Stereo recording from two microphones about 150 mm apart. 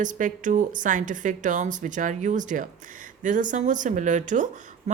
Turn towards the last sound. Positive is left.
turn(degrees=-55)  # may be behind; listen again after turning